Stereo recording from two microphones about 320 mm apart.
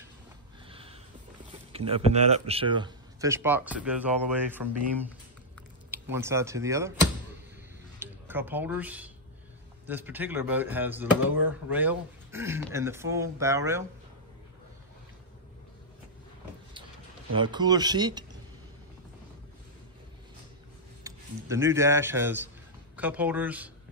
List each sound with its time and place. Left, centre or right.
0.7 s sniff: centre
1.7 s speech: centre
5.9 s speech: centre
17.3 s speech: centre
21.0 s speech: centre